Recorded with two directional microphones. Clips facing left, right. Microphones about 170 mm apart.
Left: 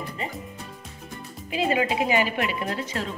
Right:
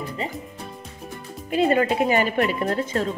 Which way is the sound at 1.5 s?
50° right (ahead or behind).